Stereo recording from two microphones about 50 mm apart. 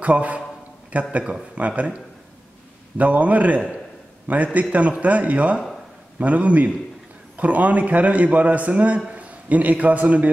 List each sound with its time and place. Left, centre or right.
0.0 s a man's voice: right
3.0 s a man's voice: right